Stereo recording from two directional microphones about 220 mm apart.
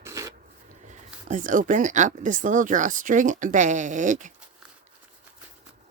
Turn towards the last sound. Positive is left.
turn(degrees=-35)  # may be behind; listen again after turning